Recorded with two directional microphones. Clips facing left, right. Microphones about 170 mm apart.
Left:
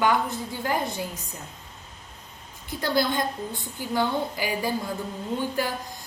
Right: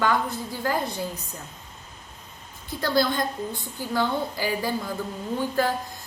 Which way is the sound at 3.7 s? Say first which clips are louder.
Even; 15° left (ahead or behind).